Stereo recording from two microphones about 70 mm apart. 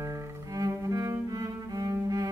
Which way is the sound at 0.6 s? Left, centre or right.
Right.